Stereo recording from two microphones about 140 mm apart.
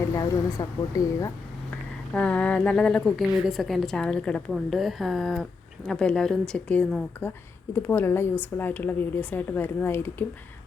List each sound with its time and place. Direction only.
0.1 s speech: 25° left (ahead or behind)
2.1 s a woman's voice: 10° left (ahead or behind)